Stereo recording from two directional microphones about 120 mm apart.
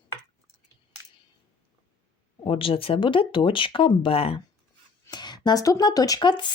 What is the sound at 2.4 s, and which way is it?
Speech, 50° left (ahead or behind).